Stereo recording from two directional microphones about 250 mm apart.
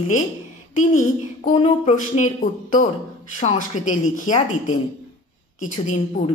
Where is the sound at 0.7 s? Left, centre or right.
Left.